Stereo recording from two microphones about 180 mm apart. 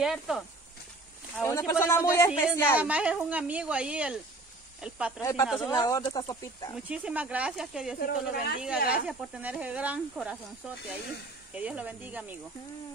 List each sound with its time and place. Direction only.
0.0 s speech: centre (ahead or behind)
1.4 s speech: 15° left (ahead or behind)
2.8 s a woman's voice: 5° right (ahead or behind)
5.2 s speech: 20° left (ahead or behind)
5.5 s speech: centre (ahead or behind)
5.8 s speech: 20° left (ahead or behind)
6.7 s speech: 5° right (ahead or behind)
8.0 s speech: 55° left (ahead or behind)
8.9 s a woman's voice: 5° right (ahead or behind)
11.5 s a woman's voice: 5° right (ahead or behind)